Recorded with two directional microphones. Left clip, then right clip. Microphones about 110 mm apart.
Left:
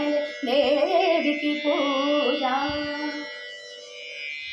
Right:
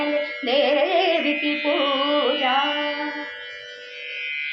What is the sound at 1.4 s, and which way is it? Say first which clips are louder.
Carnatic music: right 2 dB; 5° left (ahead or behind).